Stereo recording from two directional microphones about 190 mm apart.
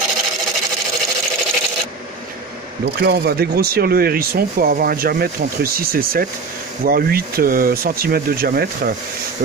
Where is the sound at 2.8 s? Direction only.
60° right (ahead or behind).